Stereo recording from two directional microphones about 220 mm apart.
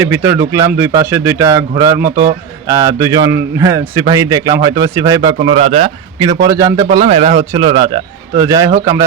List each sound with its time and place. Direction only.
0.0 s a man's voice: 10° right (ahead or behind)